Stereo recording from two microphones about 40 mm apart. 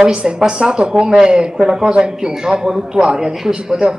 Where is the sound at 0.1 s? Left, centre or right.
Right.